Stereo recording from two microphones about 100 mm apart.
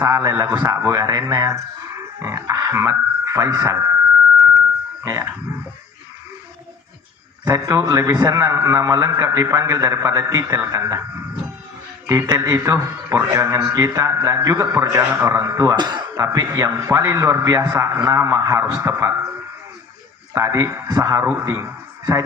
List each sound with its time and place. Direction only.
0.0 s a man's voice: 35° right (ahead or behind)
5.0 s a man's voice: 30° right (ahead or behind)
7.4 s a man's voice: 35° right (ahead or behind)
12.3 s a man's voice: 30° right (ahead or behind)
15.7 s speech: 50° right (ahead or behind)
16.1 s a man's voice: 30° right (ahead or behind)
20.3 s a man's voice: 30° right (ahead or behind)